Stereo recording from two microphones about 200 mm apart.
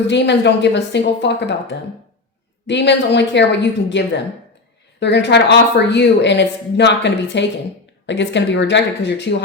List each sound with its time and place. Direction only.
0.1 s speech: 60° left (ahead or behind)